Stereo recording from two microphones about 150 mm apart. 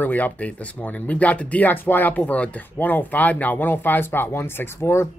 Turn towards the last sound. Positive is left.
turn(degrees=15)  # may be behind; listen again after turning